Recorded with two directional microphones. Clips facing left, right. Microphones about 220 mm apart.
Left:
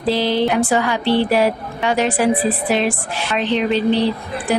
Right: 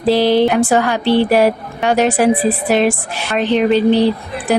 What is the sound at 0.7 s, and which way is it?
A woman's voice, 45° right (ahead or behind).